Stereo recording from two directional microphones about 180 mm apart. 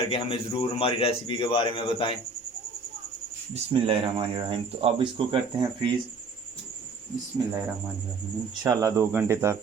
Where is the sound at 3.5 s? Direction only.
30° right (ahead or behind).